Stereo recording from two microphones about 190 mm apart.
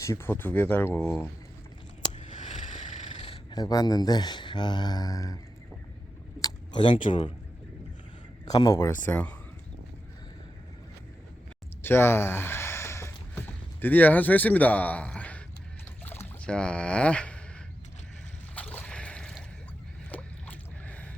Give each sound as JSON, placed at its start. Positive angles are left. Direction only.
{"t": 0.0, "sound": "speech", "side_deg": 15}
{"t": 2.1, "sound": "scissors", "side_deg": 40}
{"t": 3.2, "sound": "speech", "side_deg": 25}
{"t": 6.4, "sound": "a sound", "side_deg": 25}
{"t": 7.1, "sound": "speech", "side_deg": 25}
{"t": 8.4, "sound": "speech", "side_deg": 20}
{"t": 11.8, "sound": "a sound", "side_deg": 10}
{"t": 18.5, "sound": "a sound", "side_deg": 10}
{"t": 20.1, "sound": "boat", "side_deg": 10}